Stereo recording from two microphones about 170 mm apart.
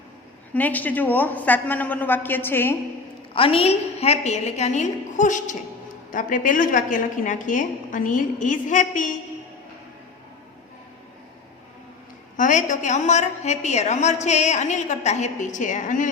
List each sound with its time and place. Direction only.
0.5 s a woman's voice: 10° left (ahead or behind)
3.3 s a woman's voice: 30° left (ahead or behind); by 9.1 s 50° left (ahead or behind)
12.4 s a woman's voice: 50° left (ahead or behind)